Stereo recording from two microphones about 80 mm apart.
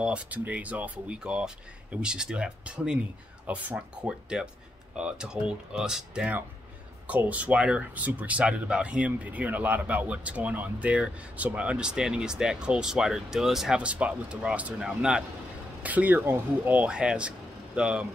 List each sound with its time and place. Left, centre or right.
0.0 s speech: centre
7.1 s speech: centre
13.7 s speech: centre
16.9 s speech: centre